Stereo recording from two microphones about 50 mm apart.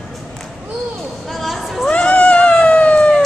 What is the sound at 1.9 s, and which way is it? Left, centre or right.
Cat, left.